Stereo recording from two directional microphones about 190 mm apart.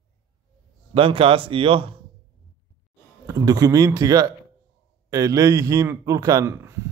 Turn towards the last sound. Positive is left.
turn(degrees=-15)  # may be behind; listen again after turning